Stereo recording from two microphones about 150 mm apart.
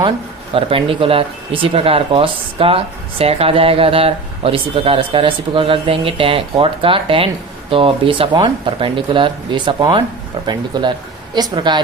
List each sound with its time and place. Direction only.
0.5 s speech: 40° right (ahead or behind)